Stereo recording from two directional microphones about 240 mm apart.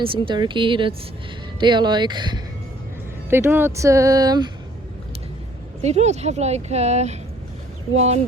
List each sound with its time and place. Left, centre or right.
0.0 s a woman's voice: right
5.8 s a woman's voice: right